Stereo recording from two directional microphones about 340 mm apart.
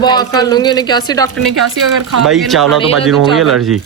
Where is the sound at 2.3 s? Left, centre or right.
Centre.